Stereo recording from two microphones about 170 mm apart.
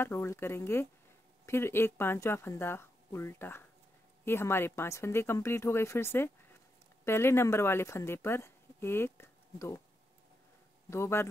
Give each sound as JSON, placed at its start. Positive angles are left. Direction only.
{"t": 0.0, "sound": "speech", "side_deg": 15}
{"t": 10.9, "sound": "speech", "side_deg": 15}